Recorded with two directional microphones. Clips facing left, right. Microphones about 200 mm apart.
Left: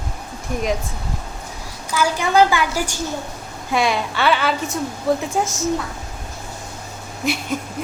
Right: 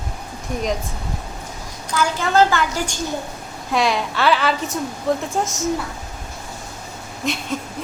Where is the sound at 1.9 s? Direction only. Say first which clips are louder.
Left 1 dB; 10° left (ahead or behind).